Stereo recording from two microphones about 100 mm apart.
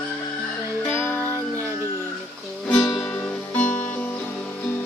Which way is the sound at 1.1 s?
25° right (ahead or behind).